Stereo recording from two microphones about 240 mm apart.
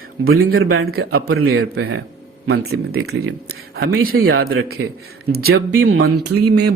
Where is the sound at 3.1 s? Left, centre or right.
Right.